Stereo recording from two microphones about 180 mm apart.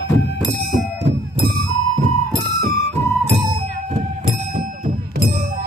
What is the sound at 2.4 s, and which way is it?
Music, 50° right (ahead or behind).